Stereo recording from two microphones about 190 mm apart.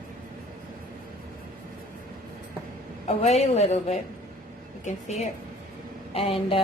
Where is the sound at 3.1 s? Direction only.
35° left (ahead or behind).